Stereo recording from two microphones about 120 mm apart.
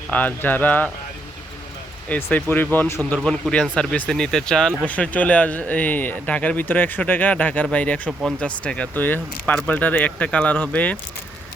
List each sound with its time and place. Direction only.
0.1 s speech: 15° left (ahead or behind)
2.0 s speech: 15° left (ahead or behind)
3.2 s speech: 5° left (ahead or behind)